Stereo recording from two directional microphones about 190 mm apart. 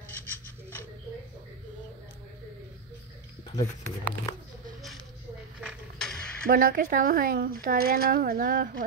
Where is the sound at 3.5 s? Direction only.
20° left (ahead or behind).